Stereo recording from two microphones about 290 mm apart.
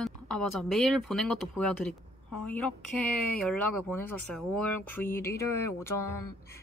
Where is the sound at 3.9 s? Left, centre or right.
Left.